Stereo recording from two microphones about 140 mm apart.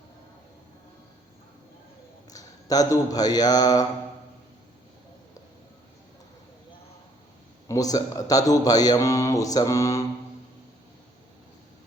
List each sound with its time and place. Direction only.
2.3 s a man's voice: 25° left (ahead or behind)
7.7 s a man's voice: 25° left (ahead or behind)